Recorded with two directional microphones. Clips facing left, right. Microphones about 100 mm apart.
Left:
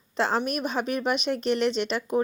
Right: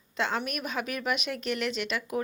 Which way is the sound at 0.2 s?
35° left (ahead or behind).